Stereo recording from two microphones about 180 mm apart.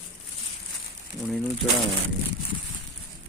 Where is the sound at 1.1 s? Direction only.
Centre (ahead or behind).